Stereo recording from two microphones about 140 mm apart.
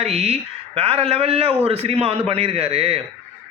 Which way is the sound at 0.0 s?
45° right (ahead or behind).